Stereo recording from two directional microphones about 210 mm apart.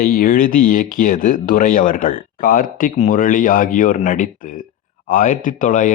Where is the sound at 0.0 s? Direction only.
45° left (ahead or behind).